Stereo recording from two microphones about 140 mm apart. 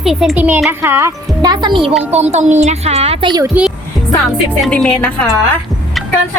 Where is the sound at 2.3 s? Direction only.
55° right (ahead or behind).